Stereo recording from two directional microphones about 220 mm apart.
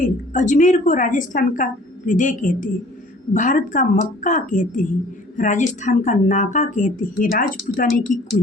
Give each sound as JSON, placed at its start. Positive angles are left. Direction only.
{"t": 0.0, "sound": "a woman's voice", "side_deg": 35}